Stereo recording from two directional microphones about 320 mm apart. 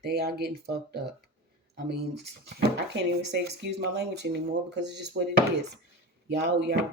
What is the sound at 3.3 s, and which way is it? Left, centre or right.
Speech, right.